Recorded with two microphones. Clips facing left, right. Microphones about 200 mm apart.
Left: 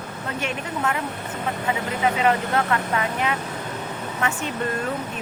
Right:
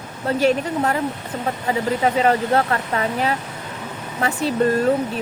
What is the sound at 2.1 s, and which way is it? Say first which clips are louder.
Speech: right 4 dB; 35° right (ahead or behind).